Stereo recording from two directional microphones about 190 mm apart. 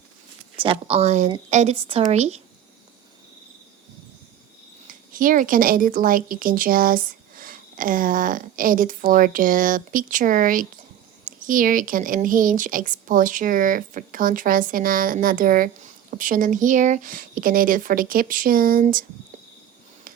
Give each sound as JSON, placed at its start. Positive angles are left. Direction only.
{"t": 0.5, "sound": "a woman's voice", "side_deg": -25}
{"t": 4.9, "sound": "speech", "side_deg": -45}